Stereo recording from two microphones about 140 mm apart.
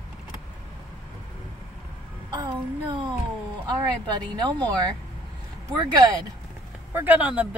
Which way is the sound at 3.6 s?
30° right (ahead or behind).